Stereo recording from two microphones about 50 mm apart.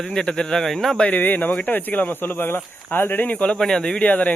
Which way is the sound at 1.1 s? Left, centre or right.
Left.